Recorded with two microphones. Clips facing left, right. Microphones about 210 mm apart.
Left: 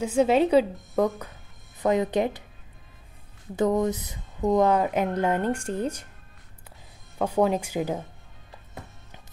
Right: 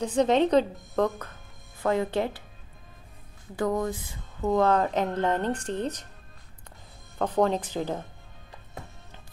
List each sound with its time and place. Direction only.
0.0 s speech: 10° left (ahead or behind)
3.5 s speech: 20° left (ahead or behind)
7.2 s speech: 10° left (ahead or behind)